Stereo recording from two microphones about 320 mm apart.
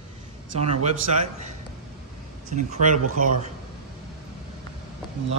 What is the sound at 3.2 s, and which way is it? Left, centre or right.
Speech, right.